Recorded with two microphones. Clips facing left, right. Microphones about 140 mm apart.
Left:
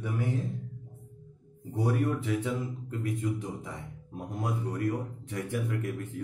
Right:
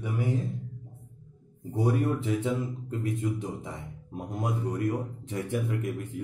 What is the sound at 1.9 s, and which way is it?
Speech, 20° right (ahead or behind).